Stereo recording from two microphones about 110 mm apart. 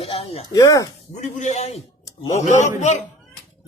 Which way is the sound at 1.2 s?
90° left.